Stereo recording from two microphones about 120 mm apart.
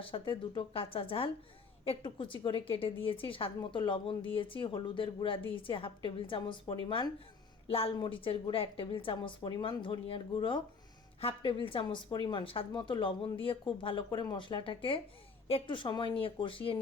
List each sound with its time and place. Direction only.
0.0 s a woman's voice: 45° left (ahead or behind)
7.7 s speech: 55° left (ahead or behind)